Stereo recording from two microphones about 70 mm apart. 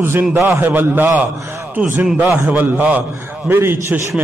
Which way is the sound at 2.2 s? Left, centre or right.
Right.